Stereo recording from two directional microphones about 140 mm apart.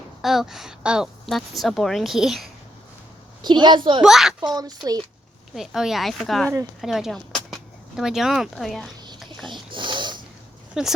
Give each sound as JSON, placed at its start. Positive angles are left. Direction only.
{"t": 0.2, "sound": "a woman's voice", "side_deg": 0}
{"t": 3.4, "sound": "a woman's voice", "side_deg": -30}
{"t": 4.0, "sound": "a woman's voice", "side_deg": -5}
{"t": 4.4, "sound": "a child's voice", "side_deg": -30}
{"t": 5.5, "sound": "a woman's voice", "side_deg": -5}
{"t": 9.5, "sound": "wheeze", "side_deg": -35}
{"t": 10.8, "sound": "a woman's voice", "side_deg": -5}